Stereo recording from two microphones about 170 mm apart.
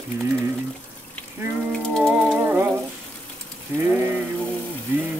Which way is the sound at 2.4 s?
10° right (ahead or behind).